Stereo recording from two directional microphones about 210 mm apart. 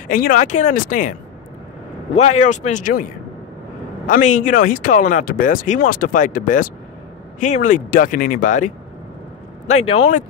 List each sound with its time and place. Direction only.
0.1 s speech: 40° left (ahead or behind)
2.1 s speech: 30° left (ahead or behind)
4.1 s speech: 35° left (ahead or behind)